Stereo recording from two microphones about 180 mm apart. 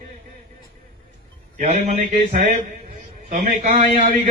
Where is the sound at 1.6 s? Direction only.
45° right (ahead or behind).